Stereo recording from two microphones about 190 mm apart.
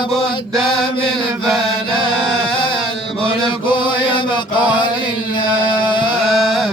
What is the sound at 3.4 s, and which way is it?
Mantra, 25° left (ahead or behind).